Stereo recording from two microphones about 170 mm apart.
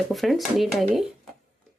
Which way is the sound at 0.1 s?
Centre (ahead or behind).